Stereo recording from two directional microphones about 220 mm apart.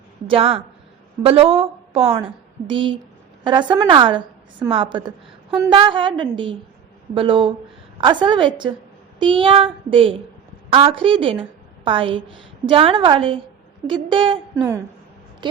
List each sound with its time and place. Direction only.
0.3 s a woman's voice: 25° right (ahead or behind)
14.5 s speech: 10° right (ahead or behind)